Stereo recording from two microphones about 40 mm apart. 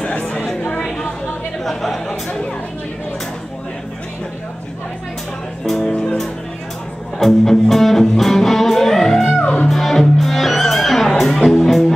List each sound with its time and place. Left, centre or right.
0.0 s speech: left
1.6 s a sound: centre
5.7 s music: centre
7.2 s music: centre